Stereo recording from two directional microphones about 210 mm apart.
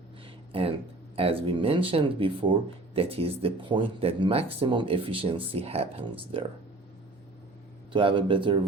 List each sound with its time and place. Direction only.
0.5 s speech: 25° right (ahead or behind)
7.9 s speech: 25° right (ahead or behind)